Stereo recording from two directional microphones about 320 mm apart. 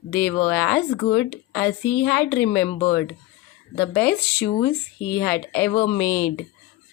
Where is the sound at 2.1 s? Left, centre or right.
Centre.